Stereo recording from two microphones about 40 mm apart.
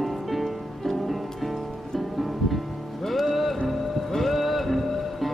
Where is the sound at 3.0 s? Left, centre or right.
Centre.